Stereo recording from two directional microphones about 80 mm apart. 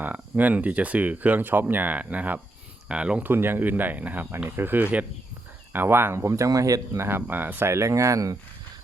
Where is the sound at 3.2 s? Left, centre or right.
Right.